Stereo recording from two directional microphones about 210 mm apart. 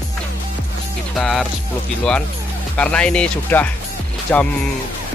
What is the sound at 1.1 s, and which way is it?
Speech, centre (ahead or behind).